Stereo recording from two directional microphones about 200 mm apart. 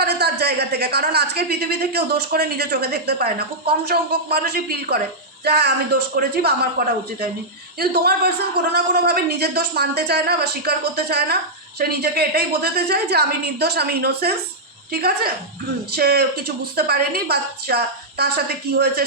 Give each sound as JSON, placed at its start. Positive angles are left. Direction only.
{"t": 0.0, "sound": "a woman's voice", "side_deg": -55}
{"t": 15.9, "sound": "a woman's voice", "side_deg": -50}